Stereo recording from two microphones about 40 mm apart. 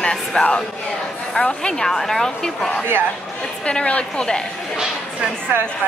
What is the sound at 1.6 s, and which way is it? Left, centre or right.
Speech, centre.